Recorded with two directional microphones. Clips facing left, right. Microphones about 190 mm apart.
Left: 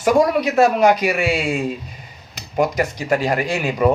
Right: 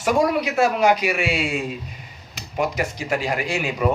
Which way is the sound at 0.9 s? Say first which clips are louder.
Left 3 dB; 35° left (ahead or behind).